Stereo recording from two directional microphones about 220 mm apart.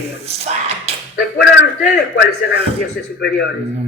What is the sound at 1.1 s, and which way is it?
A man's voice, 45° left (ahead or behind).